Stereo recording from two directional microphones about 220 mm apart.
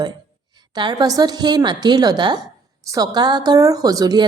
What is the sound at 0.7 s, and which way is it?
A woman's voice, 20° right (ahead or behind).